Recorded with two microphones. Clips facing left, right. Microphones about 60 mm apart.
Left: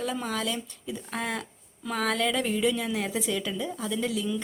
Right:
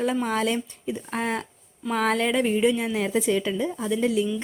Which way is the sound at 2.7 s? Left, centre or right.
Right.